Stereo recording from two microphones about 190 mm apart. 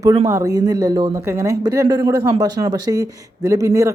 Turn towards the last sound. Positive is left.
turn(degrees=-15)  # may be behind; listen again after turning